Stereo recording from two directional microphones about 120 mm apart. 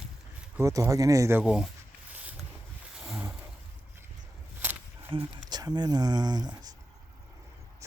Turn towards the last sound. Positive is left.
turn(degrees=-35)  # may be behind; listen again after turning